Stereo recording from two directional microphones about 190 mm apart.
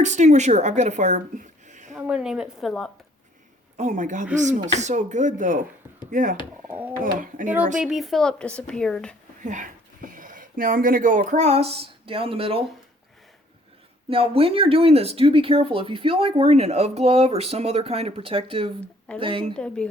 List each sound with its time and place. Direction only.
0.0 s speech: 40° right (ahead or behind)
1.9 s a woman's voice: 5° right (ahead or behind)
3.8 s speech: 40° right (ahead or behind)
6.7 s a woman's voice: 10° right (ahead or behind)
9.4 s speech: 40° right (ahead or behind)
14.1 s speech: 30° right (ahead or behind)
19.5 s a woman's voice: 5° left (ahead or behind)